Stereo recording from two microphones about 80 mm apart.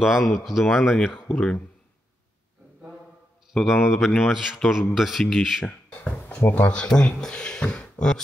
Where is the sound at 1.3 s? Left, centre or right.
Centre.